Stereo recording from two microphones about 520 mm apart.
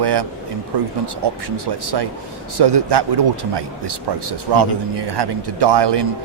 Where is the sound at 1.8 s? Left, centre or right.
Right.